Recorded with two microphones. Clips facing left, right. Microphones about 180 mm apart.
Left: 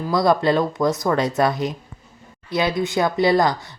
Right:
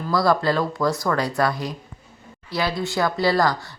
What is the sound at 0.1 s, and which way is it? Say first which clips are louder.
Speech: left 2 dB; 20° left (ahead or behind).